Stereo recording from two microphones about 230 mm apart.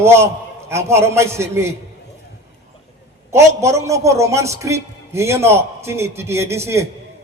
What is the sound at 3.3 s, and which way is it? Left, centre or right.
A man's voice, centre.